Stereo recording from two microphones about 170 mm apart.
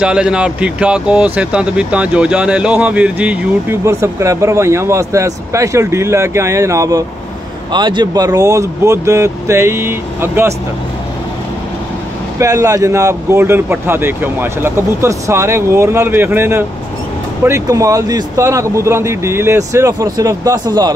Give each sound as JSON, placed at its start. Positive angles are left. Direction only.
{"t": 0.0, "sound": "speech", "side_deg": -5}
{"t": 12.4, "sound": "speech", "side_deg": -20}